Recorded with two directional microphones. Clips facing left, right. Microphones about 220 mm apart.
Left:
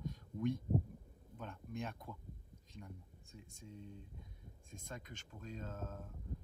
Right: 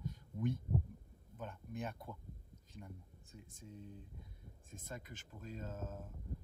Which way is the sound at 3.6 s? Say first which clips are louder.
Even; centre (ahead or behind).